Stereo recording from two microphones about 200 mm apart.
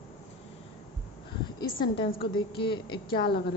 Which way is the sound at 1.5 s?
25° left (ahead or behind).